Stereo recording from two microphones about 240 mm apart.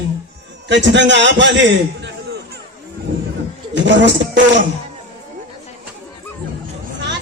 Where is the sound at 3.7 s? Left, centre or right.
Right.